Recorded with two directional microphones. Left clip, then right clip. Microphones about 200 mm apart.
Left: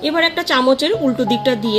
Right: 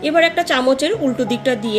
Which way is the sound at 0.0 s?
35° left (ahead or behind).